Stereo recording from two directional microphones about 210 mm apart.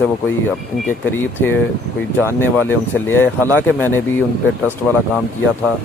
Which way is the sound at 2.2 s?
10° left (ahead or behind).